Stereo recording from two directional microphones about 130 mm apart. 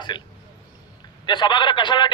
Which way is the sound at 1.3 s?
35° left (ahead or behind).